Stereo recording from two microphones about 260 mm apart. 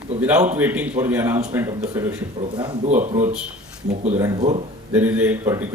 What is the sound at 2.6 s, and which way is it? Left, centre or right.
Speech, right.